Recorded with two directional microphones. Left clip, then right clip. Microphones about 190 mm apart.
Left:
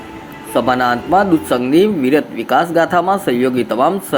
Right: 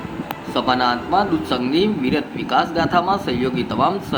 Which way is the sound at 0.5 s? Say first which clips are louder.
Left 4 dB; 30° left (ahead or behind).